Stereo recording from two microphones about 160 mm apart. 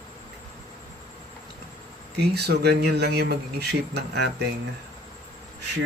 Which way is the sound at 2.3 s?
90° right.